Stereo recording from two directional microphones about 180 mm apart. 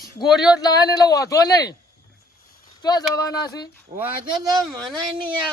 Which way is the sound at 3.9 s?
55° right (ahead or behind).